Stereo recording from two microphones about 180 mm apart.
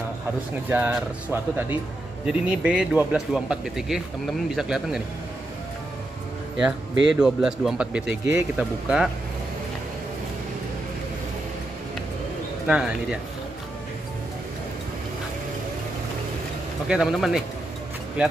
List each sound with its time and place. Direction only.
0.7 s speech: 10° right (ahead or behind)
6.5 s speech: 5° right (ahead or behind)
12.6 s speech: 5° right (ahead or behind)
16.8 s speech: 5° right (ahead or behind)